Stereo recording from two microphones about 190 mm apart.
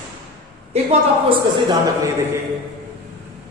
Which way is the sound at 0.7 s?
35° right (ahead or behind).